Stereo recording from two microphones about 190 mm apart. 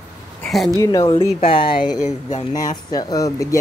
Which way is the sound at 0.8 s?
20° left (ahead or behind).